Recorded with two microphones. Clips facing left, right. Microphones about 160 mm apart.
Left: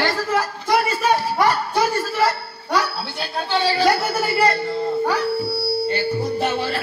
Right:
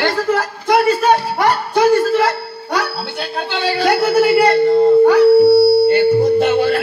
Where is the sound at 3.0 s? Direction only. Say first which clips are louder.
Right 4 dB; 65° right (ahead or behind).